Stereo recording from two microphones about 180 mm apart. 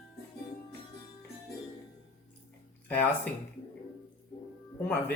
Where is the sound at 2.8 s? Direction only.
10° left (ahead or behind).